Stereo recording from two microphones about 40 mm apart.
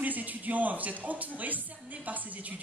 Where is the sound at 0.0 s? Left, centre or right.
Right.